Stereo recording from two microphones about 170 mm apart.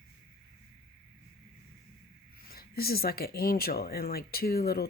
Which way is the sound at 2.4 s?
60° left (ahead or behind).